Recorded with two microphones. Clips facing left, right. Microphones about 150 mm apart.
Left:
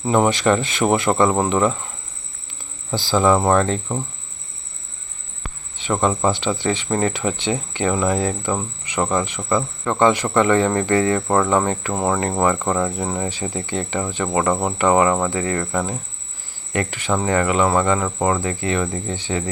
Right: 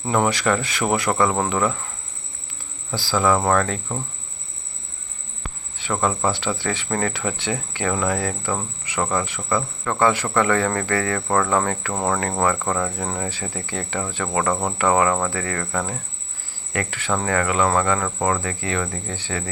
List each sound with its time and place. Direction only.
0.0 s speech: 20° left (ahead or behind)
2.9 s speech: 20° left (ahead or behind)
5.7 s speech: 20° left (ahead or behind)